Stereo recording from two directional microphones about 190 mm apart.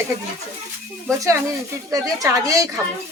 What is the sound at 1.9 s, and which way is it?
Speech, 20° right (ahead or behind).